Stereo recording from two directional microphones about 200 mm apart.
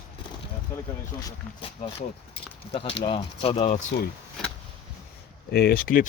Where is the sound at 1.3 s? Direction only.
25° left (ahead or behind).